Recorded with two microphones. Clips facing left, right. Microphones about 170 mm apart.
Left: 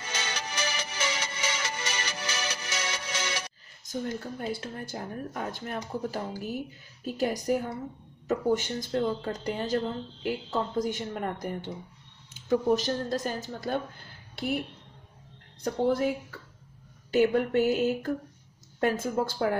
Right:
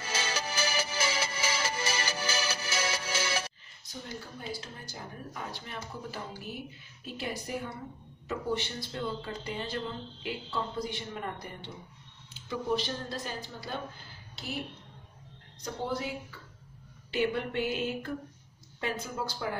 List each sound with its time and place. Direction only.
0.0 s music: 30° right (ahead or behind)
3.8 s speech: 50° left (ahead or behind)
14.3 s a woman's voice: 55° left (ahead or behind)
15.6 s speech: 50° left (ahead or behind)